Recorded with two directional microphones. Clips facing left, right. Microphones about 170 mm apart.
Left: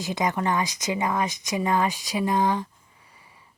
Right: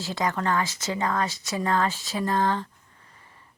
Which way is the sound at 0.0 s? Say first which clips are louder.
Left 2 dB; 15° left (ahead or behind).